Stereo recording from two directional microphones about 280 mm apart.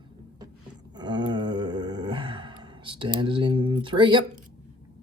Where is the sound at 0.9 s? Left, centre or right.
Centre.